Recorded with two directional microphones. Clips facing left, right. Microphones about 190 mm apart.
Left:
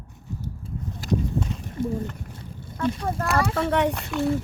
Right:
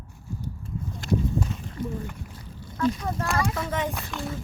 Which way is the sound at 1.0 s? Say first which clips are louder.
Left 1 dB; centre (ahead or behind).